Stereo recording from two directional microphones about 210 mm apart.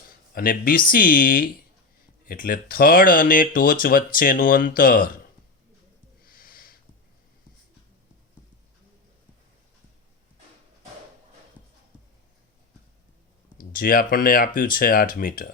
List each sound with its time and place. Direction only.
0.3 s speech: 40° left (ahead or behind)
6.2 s a sound: 40° left (ahead or behind)
13.6 s speech: 40° left (ahead or behind)